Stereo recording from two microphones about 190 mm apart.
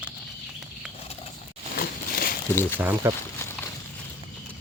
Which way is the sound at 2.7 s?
10° right (ahead or behind).